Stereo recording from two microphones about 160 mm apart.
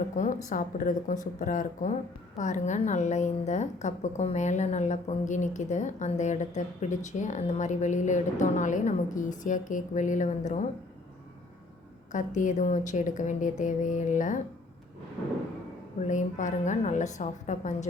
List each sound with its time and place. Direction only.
0.4 s speech: 55° left (ahead or behind)
12.1 s speech: 50° left (ahead or behind)
16.0 s speech: 50° left (ahead or behind)